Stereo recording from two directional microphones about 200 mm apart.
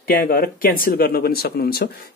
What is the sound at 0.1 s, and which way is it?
Speech, 50° left (ahead or behind).